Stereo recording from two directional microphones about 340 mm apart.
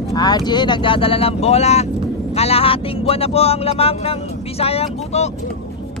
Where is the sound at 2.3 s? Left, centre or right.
Centre.